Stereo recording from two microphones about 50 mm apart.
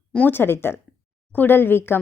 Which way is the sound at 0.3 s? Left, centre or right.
Left.